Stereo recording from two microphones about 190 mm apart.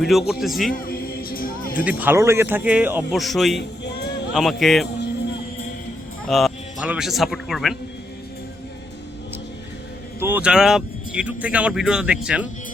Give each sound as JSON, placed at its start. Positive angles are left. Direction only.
{"t": 0.0, "sound": "speech", "side_deg": 0}
{"t": 0.7, "sound": "music", "side_deg": 50}
{"t": 1.8, "sound": "a man's voice", "side_deg": -10}
{"t": 6.2, "sound": "speech", "side_deg": 0}
{"t": 10.2, "sound": "speech", "side_deg": -10}